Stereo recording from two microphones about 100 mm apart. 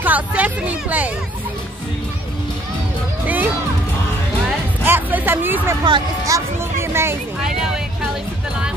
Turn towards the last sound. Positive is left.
turn(degrees=-5)  # may be behind; listen again after turning